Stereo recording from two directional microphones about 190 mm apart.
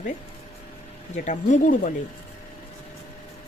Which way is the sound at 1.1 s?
40° left (ahead or behind).